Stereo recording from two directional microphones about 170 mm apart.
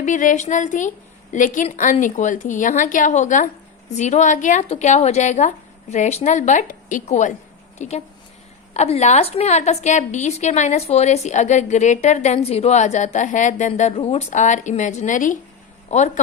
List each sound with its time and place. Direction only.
0.0 s a woman's voice: 50° left (ahead or behind)